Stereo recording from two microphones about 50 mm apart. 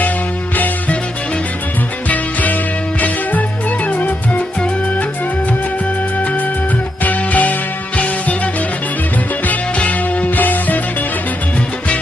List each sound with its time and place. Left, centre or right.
0.5 s music: left
2.0 s music: left
3.8 s music: left
6.2 s music: left
9.5 s music: left